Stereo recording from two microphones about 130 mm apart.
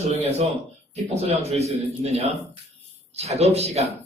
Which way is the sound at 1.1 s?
55° right (ahead or behind).